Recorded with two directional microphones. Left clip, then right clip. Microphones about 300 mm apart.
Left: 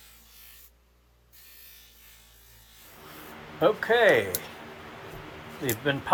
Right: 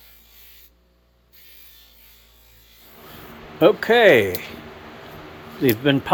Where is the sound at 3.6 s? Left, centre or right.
Right.